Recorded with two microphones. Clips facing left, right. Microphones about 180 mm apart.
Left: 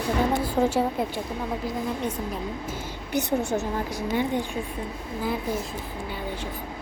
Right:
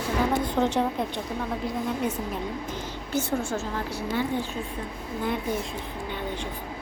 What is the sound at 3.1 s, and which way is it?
A woman's voice, 15° left (ahead or behind).